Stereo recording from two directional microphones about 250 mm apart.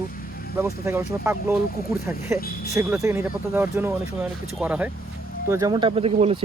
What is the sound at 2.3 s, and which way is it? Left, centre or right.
Speech, left.